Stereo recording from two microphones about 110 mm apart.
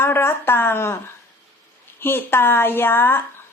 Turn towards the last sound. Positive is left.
turn(degrees=20)  # may be behind; listen again after turning